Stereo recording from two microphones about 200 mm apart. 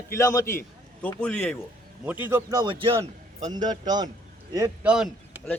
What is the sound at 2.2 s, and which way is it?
A man's voice, 15° right (ahead or behind).